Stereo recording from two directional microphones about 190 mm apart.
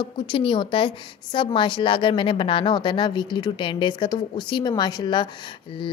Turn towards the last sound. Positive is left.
turn(degrees=25)  # may be behind; listen again after turning